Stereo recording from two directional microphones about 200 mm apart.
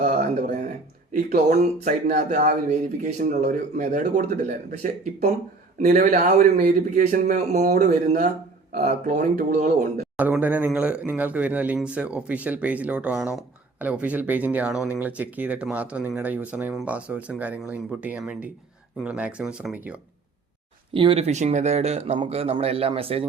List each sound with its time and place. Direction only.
0.0 s a sound: 40° right (ahead or behind)
1.1 s a man's voice: 40° right (ahead or behind)
10.2 s speech: 10° right (ahead or behind)
20.9 s speech: 25° right (ahead or behind)